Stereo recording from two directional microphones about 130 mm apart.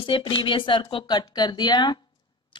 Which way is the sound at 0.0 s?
40° left (ahead or behind).